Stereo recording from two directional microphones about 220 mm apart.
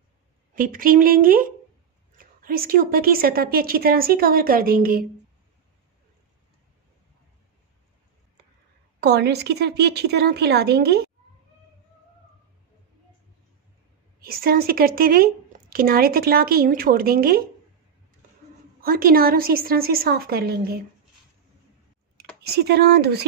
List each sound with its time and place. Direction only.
0.6 s a woman's voice: 40° right (ahead or behind)
9.0 s speech: 50° right (ahead or behind)
14.2 s speech: 45° right (ahead or behind)
18.8 s speech: 40° right (ahead or behind)
22.4 s speech: 45° right (ahead or behind)